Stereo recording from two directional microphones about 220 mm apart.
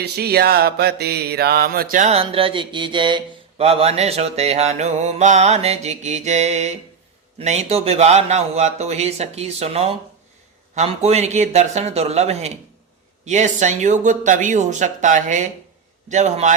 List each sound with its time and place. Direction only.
0.0 s mantra: 45° right (ahead or behind); by 12.5 s 30° right (ahead or behind)
13.2 s speech: 35° right (ahead or behind)